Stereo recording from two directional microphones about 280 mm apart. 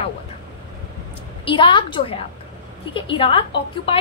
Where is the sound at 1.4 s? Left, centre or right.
Centre.